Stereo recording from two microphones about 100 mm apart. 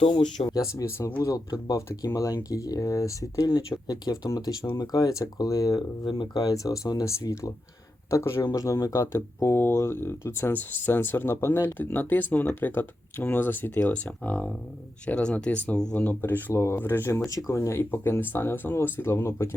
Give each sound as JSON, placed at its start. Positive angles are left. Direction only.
{"t": 0.0, "sound": "speech", "side_deg": 60}
{"t": 0.5, "sound": "speech", "side_deg": 30}
{"t": 6.1, "sound": "speech", "side_deg": 45}
{"t": 8.4, "sound": "speech", "side_deg": 40}
{"t": 17.2, "sound": "speech", "side_deg": 35}